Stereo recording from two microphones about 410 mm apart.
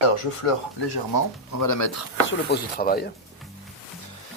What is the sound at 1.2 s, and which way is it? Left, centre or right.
Speech, left.